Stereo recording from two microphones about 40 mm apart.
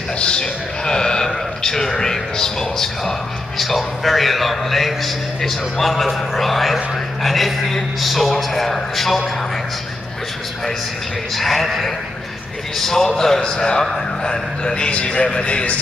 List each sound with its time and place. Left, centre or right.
0.2 s a man's voice: left
3.5 s a man's voice: centre
11.3 s a man's voice: centre; by 15.8 s left